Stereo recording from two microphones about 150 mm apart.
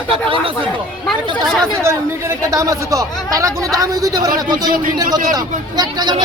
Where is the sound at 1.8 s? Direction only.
20° right (ahead or behind).